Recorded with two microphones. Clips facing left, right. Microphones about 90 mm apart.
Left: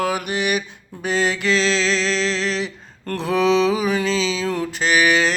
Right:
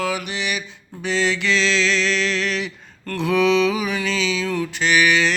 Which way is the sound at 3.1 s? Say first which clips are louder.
Even; 35° left (ahead or behind).